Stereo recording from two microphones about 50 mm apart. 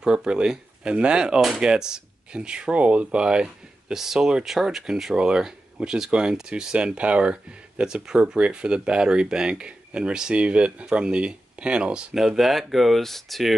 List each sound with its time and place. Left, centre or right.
0.0 s speech: centre
3.9 s speech: centre
12.1 s speech: centre